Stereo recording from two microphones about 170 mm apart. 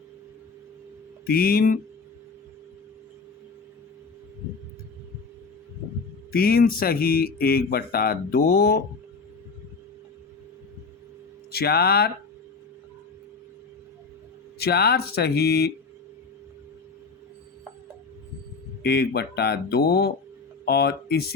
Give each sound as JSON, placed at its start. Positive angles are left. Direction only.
{"t": 1.3, "sound": "speech", "side_deg": 60}
{"t": 6.3, "sound": "speech", "side_deg": 60}
{"t": 11.5, "sound": "speech", "side_deg": 65}
{"t": 14.6, "sound": "speech", "side_deg": 70}
{"t": 18.8, "sound": "speech", "side_deg": 70}